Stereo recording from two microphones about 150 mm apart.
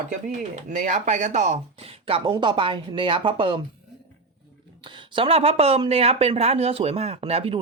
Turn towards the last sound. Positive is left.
turn(degrees=-40)  # may be behind; listen again after turning